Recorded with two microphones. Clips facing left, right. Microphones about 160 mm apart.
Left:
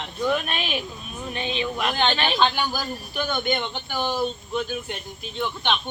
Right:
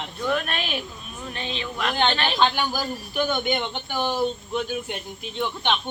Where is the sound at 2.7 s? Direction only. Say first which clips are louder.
Right 2 dB; 10° right (ahead or behind).